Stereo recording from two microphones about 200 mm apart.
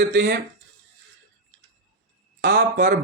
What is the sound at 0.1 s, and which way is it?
Speech, 65° right (ahead or behind).